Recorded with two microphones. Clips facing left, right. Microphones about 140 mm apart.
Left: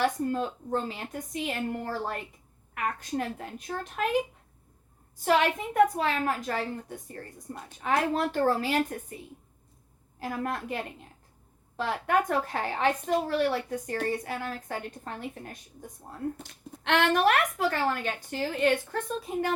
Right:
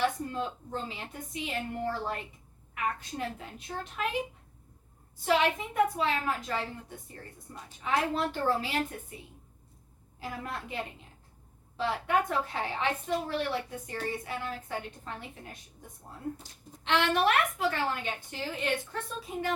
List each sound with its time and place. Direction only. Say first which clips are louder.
0.0 s a woman's voice: left 3 dB; 45° left (ahead or behind)
5.2 s a woman's voice: left 2 dB; 50° left (ahead or behind)
10.2 s a woman's voice: left 6 dB; 50° left (ahead or behind)
16.4 s a woman's voice: left 6 dB; 60° left (ahead or behind)